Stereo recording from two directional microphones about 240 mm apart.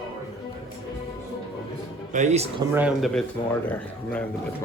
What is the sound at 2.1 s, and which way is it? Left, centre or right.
Speech, right.